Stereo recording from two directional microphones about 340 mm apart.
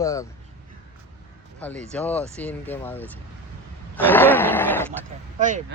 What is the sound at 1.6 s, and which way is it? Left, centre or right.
Speech, centre.